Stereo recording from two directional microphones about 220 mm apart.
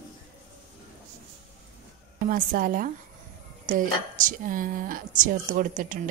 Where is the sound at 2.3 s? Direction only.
40° right (ahead or behind).